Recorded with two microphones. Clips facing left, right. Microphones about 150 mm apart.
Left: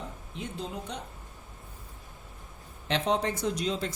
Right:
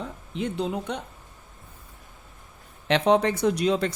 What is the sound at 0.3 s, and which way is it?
Speech, 75° right (ahead or behind).